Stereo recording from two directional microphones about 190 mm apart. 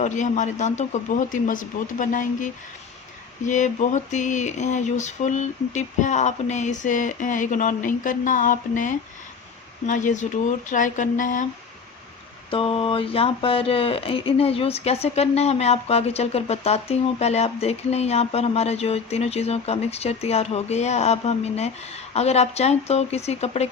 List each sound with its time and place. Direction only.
0.0 s speech: 40° left (ahead or behind)
12.5 s speech: 30° left (ahead or behind)